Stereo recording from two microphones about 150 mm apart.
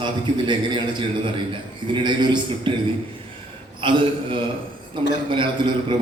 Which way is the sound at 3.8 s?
35° right (ahead or behind).